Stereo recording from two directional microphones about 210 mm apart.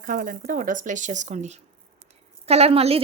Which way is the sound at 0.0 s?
40° right (ahead or behind).